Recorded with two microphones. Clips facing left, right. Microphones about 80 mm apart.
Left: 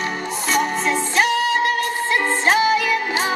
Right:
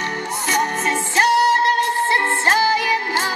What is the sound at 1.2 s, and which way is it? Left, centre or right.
Music, centre.